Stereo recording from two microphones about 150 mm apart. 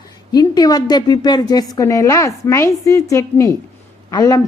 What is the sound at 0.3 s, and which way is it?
Speech, 25° left (ahead or behind).